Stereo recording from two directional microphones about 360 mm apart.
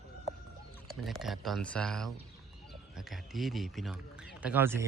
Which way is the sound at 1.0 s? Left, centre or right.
Centre.